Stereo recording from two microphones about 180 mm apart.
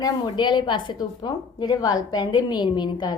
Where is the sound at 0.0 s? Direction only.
25° left (ahead or behind).